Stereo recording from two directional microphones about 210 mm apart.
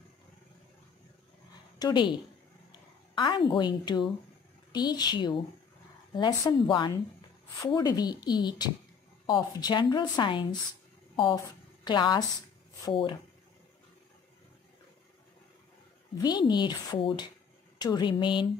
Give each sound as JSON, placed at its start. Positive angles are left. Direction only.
{"t": 1.8, "sound": "speech", "side_deg": 20}
{"t": 3.2, "sound": "speech", "side_deg": 20}
{"t": 11.8, "sound": "speech", "side_deg": 20}
{"t": 16.2, "sound": "speech", "side_deg": 20}